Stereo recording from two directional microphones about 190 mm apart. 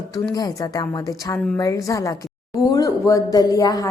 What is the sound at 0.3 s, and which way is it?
A woman's voice, 20° left (ahead or behind).